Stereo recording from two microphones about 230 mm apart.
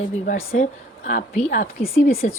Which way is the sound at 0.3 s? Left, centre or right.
Left.